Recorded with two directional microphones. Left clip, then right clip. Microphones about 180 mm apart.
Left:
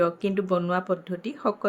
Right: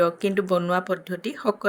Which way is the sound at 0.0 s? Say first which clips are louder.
Right 3 dB; 40° right (ahead or behind).